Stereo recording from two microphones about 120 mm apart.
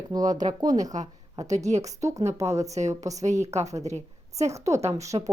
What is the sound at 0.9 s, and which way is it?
Speech, 75° right (ahead or behind).